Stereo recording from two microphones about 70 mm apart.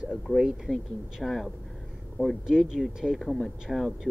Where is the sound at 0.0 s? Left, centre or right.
Centre.